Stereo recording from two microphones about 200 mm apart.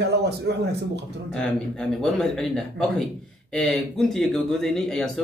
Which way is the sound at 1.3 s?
5° left (ahead or behind).